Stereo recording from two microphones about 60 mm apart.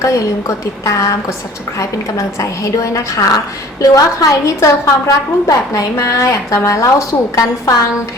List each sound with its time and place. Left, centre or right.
0.0 s a woman's voice: left
3.9 s a woman's voice: left
7.3 s a woman's voice: left